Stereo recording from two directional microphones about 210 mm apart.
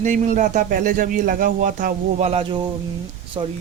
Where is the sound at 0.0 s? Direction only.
35° right (ahead or behind).